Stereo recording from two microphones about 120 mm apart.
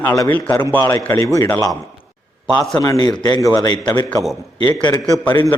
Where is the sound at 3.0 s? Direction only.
35° left (ahead or behind).